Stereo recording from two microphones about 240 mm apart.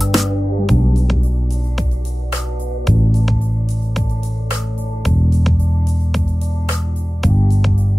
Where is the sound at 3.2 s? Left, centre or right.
Centre.